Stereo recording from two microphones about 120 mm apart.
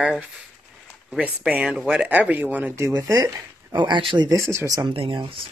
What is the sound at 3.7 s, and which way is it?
Speech, 40° right (ahead or behind).